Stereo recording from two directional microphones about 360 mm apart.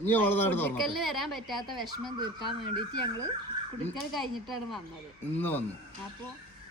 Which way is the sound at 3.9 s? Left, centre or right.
Centre.